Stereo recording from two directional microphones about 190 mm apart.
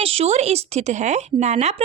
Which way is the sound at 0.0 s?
30° right (ahead or behind).